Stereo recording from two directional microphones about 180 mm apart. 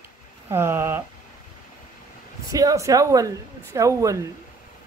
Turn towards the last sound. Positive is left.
turn(degrees=-15)  # may be behind; listen again after turning